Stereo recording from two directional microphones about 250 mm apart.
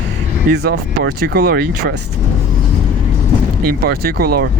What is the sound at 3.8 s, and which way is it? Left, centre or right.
Speech, right.